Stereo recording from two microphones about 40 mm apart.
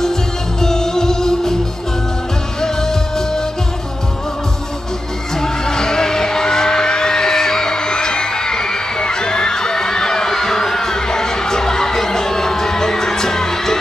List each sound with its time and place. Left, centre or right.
0.0 s music: centre
2.6 s music: centre
5.3 s music: centre